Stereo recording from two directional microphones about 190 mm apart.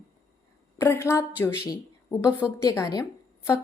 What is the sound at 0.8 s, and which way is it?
Speech, 15° left (ahead or behind).